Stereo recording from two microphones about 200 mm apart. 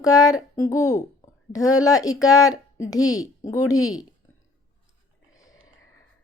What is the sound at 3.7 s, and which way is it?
Speech, 90° left.